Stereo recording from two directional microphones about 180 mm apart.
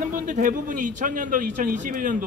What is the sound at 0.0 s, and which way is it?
A man's voice, 45° right (ahead or behind).